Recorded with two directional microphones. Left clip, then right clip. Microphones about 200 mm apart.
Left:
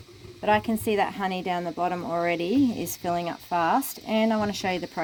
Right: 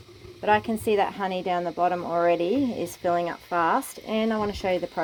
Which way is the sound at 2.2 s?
35° left (ahead or behind).